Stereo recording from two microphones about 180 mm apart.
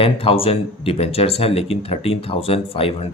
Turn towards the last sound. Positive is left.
turn(degrees=35)  # may be behind; listen again after turning